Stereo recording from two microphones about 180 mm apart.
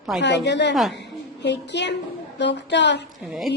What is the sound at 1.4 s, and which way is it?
A woman's voice, 75° left (ahead or behind).